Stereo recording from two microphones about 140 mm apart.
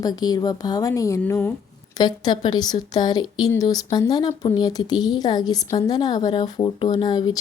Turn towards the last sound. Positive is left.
turn(degrees=30)  # may be behind; listen again after turning